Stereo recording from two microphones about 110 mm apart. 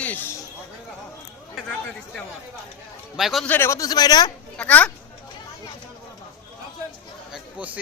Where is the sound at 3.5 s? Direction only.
20° left (ahead or behind); by 4.3 s 40° left (ahead or behind).